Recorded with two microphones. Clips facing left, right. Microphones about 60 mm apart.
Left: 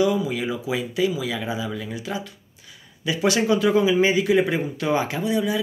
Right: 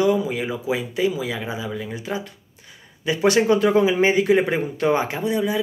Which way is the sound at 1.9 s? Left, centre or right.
Right.